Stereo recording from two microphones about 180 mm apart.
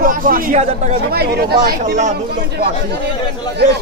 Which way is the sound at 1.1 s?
60° right (ahead or behind).